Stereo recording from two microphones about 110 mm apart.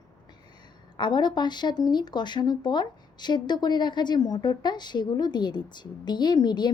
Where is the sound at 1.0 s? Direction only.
45° left (ahead or behind).